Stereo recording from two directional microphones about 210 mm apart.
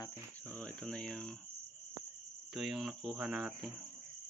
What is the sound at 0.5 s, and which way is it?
Speech, 5° left (ahead or behind).